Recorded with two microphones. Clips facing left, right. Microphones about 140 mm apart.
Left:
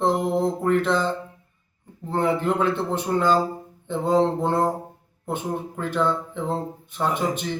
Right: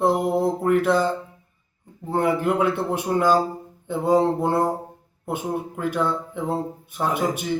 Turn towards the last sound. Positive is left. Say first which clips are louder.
# right 1 dB
turn(degrees=-10)  # may be behind; listen again after turning